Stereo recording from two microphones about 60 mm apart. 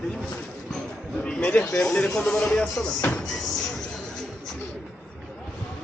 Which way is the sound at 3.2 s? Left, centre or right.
Centre.